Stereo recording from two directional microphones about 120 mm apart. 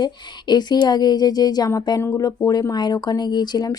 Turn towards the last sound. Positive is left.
turn(degrees=35)  # may be behind; listen again after turning